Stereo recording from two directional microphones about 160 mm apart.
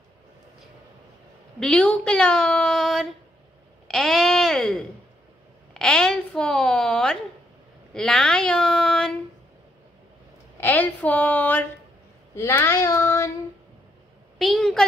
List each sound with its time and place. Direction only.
1.6 s a woman's voice: 5° left (ahead or behind)
3.8 s a sound: centre (ahead or behind)
5.8 s a woman's voice: 5° left (ahead or behind)
10.6 s a woman's voice: 10° left (ahead or behind)
12.4 s child singing: 15° left (ahead or behind)
14.4 s a sound: centre (ahead or behind)